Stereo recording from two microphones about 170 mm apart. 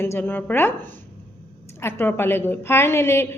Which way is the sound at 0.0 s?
15° left (ahead or behind).